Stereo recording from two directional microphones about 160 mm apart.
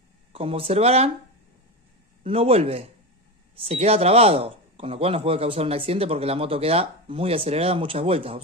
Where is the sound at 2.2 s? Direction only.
35° right (ahead or behind).